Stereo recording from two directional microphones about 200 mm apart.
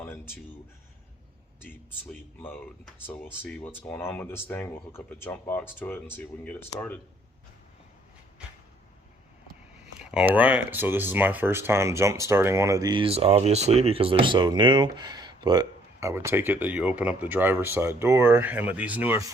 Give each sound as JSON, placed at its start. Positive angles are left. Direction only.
{"t": 2.4, "sound": "speech", "side_deg": 10}
{"t": 9.8, "sound": "a sound", "side_deg": -5}
{"t": 10.3, "sound": "speech", "side_deg": -10}